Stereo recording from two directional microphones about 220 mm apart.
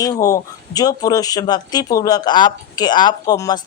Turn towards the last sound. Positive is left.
turn(degrees=15)  # may be behind; listen again after turning